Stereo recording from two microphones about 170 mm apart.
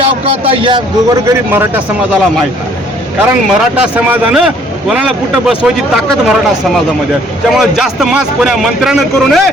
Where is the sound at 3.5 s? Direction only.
5° right (ahead or behind).